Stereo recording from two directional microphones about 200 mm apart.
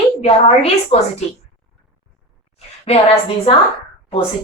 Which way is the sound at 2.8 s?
30° left (ahead or behind).